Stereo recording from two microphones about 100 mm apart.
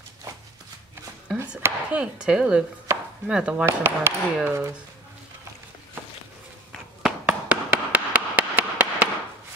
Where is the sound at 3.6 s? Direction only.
25° right (ahead or behind).